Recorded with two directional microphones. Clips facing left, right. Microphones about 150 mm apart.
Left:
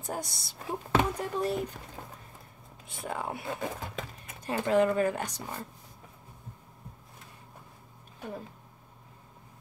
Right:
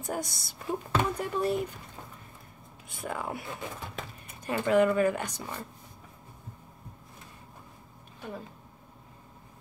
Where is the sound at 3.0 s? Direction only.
25° left (ahead or behind).